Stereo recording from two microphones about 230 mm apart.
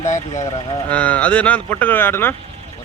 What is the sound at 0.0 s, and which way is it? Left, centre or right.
Speech, left.